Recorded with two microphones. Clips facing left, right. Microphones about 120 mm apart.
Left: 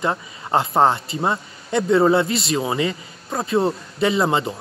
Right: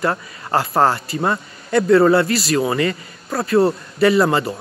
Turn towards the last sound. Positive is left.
turn(degrees=20)  # may be behind; listen again after turning